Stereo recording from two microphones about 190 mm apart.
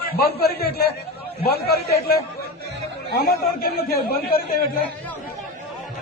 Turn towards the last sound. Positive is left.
turn(degrees=50)  # may be behind; listen again after turning